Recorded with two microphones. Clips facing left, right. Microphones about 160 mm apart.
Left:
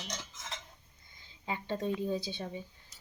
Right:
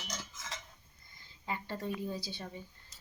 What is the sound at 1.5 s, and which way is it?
A woman's voice, 20° left (ahead or behind).